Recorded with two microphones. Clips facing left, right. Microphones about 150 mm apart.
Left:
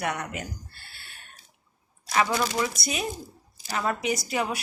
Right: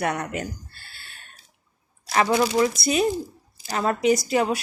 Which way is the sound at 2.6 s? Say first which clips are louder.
Right 9 dB; 35° right (ahead or behind).